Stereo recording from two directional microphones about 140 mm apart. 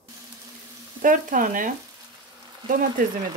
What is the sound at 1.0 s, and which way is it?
Frying, 70° right (ahead or behind).